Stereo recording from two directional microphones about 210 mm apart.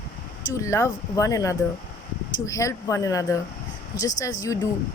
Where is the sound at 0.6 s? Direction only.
15° left (ahead or behind).